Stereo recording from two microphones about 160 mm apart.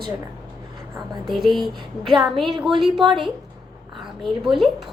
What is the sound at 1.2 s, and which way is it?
A woman's voice, centre (ahead or behind).